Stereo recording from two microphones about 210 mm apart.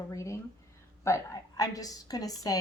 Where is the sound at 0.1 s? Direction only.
15° left (ahead or behind).